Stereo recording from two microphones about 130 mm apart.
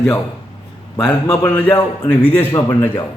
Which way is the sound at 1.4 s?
15° left (ahead or behind).